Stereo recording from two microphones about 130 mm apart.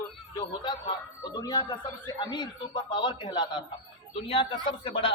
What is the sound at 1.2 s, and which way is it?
A man's voice, 30° left (ahead or behind).